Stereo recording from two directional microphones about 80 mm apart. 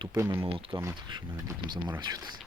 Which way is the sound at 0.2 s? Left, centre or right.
Right.